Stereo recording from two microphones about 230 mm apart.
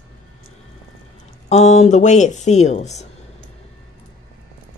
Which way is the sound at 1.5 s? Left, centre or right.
Left.